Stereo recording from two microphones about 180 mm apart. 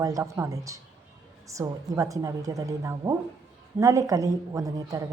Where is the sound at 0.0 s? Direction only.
15° right (ahead or behind).